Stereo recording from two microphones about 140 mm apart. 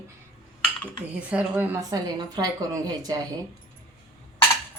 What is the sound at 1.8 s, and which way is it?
Speech, 25° right (ahead or behind).